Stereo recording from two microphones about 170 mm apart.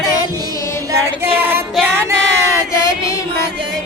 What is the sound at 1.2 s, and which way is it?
Child singing, 10° right (ahead or behind).